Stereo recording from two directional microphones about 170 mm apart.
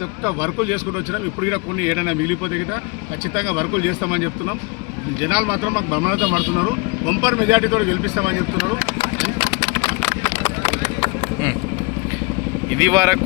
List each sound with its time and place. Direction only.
0.3 s speech: 10° right (ahead or behind)
3.3 s speech: 10° right (ahead or behind)
12.7 s speech: 15° right (ahead or behind)